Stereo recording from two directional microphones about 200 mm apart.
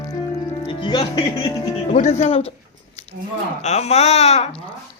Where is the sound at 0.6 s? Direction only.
25° left (ahead or behind).